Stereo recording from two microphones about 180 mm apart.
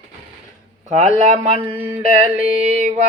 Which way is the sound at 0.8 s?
40° right (ahead or behind).